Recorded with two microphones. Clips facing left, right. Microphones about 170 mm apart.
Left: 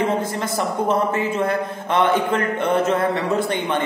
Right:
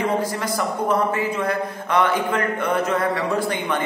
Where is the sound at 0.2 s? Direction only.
25° left (ahead or behind).